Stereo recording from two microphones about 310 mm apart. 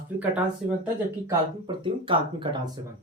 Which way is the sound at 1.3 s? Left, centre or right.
Centre.